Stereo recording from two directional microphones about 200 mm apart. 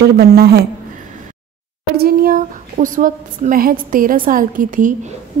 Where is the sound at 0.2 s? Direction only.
50° right (ahead or behind).